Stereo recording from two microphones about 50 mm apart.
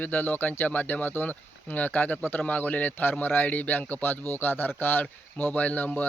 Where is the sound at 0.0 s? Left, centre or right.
Left.